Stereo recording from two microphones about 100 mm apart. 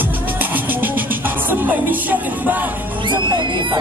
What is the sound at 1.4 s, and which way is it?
Music, 20° right (ahead or behind).